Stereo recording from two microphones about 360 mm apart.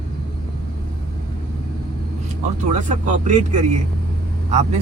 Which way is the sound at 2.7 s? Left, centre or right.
Centre.